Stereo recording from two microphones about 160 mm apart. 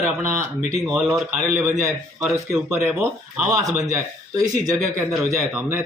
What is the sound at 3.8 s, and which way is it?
Speech, 20° right (ahead or behind).